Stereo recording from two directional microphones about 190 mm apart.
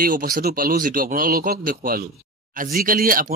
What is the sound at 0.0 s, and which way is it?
Speech, 50° right (ahead or behind).